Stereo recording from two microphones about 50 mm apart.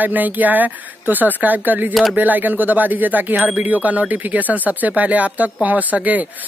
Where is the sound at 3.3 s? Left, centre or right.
Right.